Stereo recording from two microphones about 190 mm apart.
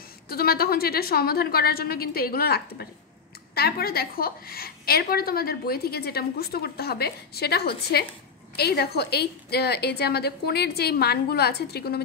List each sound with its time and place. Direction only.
0.3 s a woman's voice: 55° left (ahead or behind)